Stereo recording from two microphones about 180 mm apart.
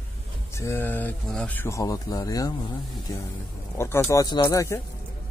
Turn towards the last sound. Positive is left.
turn(degrees=15)  # may be behind; listen again after turning